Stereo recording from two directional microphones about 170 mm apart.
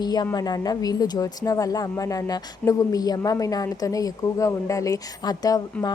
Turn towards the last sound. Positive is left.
turn(degrees=20)  # may be behind; listen again after turning